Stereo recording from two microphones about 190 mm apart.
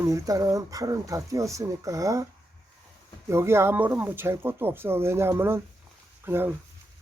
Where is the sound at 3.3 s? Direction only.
15° right (ahead or behind).